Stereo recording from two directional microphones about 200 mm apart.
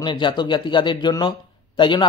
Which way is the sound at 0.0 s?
25° left (ahead or behind).